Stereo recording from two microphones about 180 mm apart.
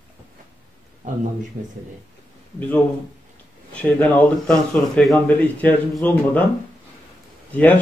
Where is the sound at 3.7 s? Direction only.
5° left (ahead or behind).